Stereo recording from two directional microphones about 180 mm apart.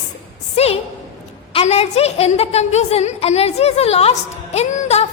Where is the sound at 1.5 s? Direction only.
35° left (ahead or behind).